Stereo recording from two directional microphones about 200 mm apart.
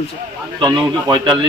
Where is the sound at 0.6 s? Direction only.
20° right (ahead or behind).